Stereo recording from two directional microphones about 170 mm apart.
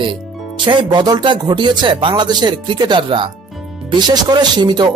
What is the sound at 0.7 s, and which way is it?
Speech, 25° right (ahead or behind).